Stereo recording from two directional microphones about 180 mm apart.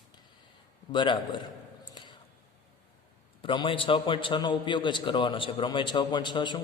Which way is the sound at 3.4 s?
25° left (ahead or behind).